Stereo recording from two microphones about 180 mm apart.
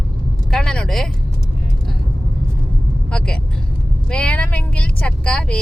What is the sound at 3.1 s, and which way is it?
Speech, 5° left (ahead or behind).